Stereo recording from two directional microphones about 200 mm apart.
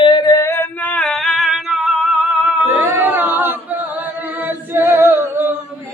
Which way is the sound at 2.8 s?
10° right (ahead or behind).